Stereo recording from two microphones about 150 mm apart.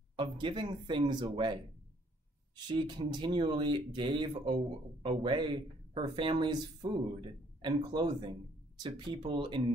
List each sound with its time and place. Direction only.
0.1 s speech: 35° right (ahead or behind)
2.7 s speech: 30° right (ahead or behind)